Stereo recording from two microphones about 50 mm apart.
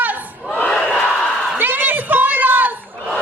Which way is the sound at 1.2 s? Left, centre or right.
Left.